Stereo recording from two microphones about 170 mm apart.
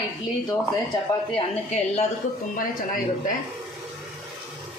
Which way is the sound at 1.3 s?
40° left (ahead or behind).